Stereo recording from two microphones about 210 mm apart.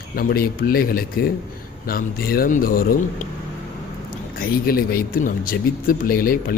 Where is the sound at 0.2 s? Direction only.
45° left (ahead or behind).